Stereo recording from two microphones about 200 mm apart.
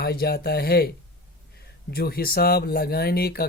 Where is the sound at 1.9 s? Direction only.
50° left (ahead or behind).